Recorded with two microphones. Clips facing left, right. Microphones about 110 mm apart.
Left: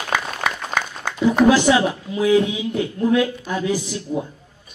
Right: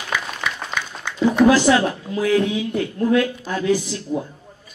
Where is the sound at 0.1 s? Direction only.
45° left (ahead or behind).